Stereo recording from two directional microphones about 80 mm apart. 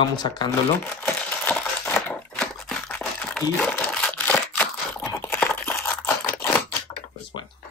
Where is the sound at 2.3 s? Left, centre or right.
Centre.